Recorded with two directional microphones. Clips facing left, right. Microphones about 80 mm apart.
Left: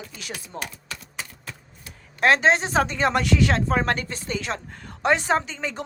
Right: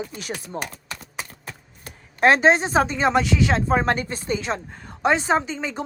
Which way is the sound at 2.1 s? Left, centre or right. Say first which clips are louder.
Right 3 dB; right.